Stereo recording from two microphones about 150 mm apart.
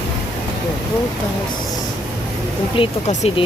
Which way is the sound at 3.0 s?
50° left (ahead or behind).